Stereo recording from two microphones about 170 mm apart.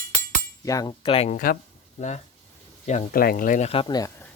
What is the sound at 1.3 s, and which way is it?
Speech, 55° left (ahead or behind).